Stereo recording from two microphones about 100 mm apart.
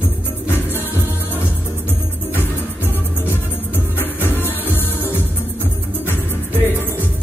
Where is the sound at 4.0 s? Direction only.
20° left (ahead or behind).